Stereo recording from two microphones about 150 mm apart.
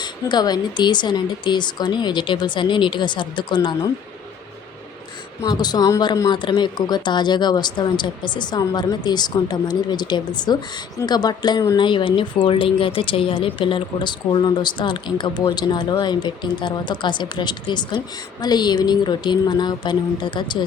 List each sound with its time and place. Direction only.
0.0 s speech: 30° left (ahead or behind)
5.4 s speech: 25° left (ahead or behind)